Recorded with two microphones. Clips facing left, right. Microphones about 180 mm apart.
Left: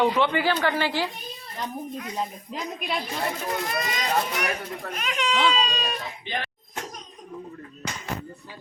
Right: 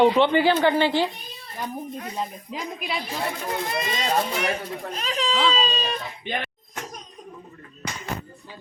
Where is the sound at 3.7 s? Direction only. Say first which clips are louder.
Right 3 dB; 25° right (ahead or behind).